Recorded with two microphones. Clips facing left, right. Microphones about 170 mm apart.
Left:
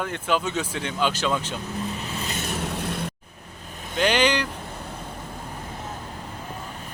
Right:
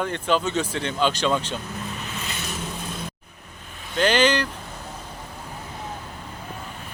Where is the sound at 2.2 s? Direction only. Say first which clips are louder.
Left 3 dB; 45° left (ahead or behind).